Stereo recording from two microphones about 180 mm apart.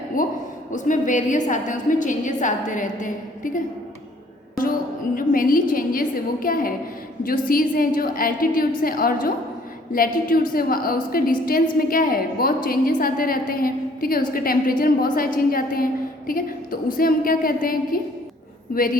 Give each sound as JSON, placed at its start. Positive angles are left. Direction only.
{"t": 0.2, "sound": "a sound", "side_deg": 45}
{"t": 0.7, "sound": "a woman's voice", "side_deg": 45}
{"t": 5.1, "sound": "a woman's voice", "side_deg": 50}